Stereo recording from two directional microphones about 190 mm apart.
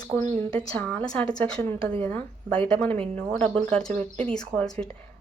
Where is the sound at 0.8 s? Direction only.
5° left (ahead or behind).